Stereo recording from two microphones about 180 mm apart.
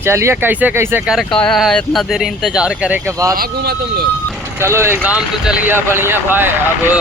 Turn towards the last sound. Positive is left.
turn(degrees=-10)  # may be behind; listen again after turning